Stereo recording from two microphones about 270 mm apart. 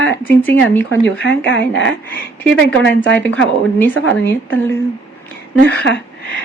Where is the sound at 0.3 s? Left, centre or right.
Centre.